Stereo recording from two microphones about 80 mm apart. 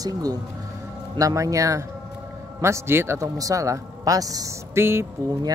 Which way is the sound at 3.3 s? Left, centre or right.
Right.